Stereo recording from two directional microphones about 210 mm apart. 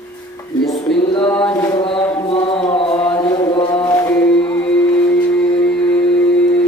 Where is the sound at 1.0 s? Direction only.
25° left (ahead or behind).